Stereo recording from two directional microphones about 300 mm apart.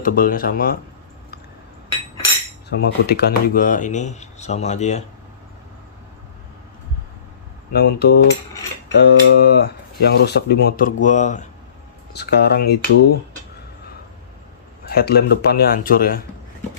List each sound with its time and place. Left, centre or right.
0.0 s speech: left
2.6 s speech: left
7.7 s speech: left
14.8 s speech: left